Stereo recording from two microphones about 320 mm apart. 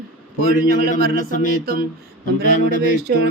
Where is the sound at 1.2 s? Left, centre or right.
Left.